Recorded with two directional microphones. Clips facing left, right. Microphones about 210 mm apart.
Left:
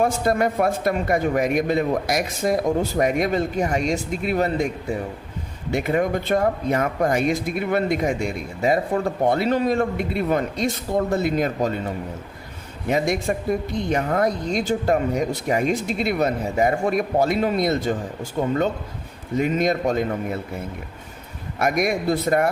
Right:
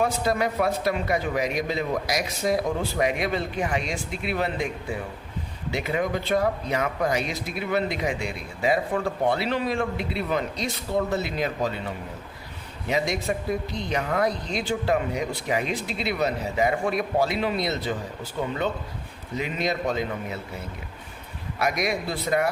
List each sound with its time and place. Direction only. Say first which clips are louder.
0.0 s speech: left 4 dB; 50° left (ahead or behind)
21.6 s speech: left 5 dB; 50° left (ahead or behind)